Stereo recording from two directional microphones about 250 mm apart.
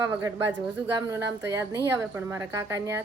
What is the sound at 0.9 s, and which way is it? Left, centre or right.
A woman's voice, centre.